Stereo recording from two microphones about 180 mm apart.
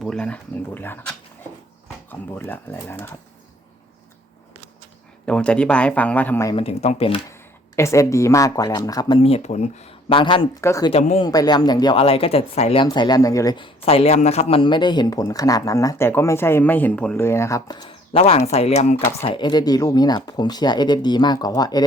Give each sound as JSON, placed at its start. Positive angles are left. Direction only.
{"t": 0.0, "sound": "speech", "side_deg": 5}
{"t": 5.2, "sound": "speech", "side_deg": 5}
{"t": 6.5, "sound": "speech", "side_deg": 30}
{"t": 7.8, "sound": "speech", "side_deg": 15}
{"t": 10.9, "sound": "speech", "side_deg": 35}
{"t": 11.3, "sound": "speech", "side_deg": 20}
{"t": 12.8, "sound": "speech", "side_deg": 25}
{"t": 19.2, "sound": "speech", "side_deg": 25}